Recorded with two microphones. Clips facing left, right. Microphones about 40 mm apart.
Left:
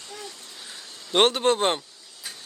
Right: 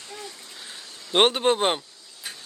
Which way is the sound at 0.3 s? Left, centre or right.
Centre.